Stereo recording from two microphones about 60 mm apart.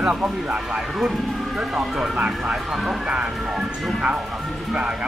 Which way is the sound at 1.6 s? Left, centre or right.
Centre.